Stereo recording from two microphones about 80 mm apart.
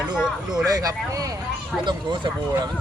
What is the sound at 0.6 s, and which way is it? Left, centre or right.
Speech, right.